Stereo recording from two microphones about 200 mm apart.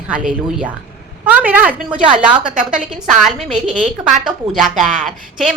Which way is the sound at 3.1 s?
Centre (ahead or behind).